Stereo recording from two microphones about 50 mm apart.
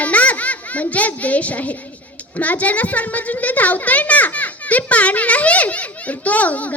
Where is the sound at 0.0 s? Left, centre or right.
Left.